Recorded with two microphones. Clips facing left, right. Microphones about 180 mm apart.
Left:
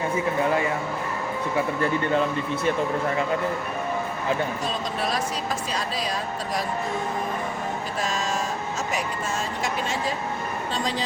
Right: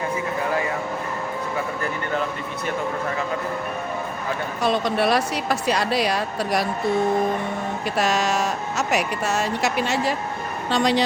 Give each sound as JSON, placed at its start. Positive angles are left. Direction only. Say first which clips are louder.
{"t": 4.6, "sound": "speech", "louder": "right 7 dB", "side_deg": -70}
{"t": 7.9, "sound": "speech", "louder": "right 7 dB", "side_deg": -75}